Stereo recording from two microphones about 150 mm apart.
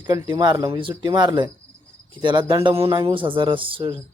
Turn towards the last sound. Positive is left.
turn(degrees=-35)  # may be behind; listen again after turning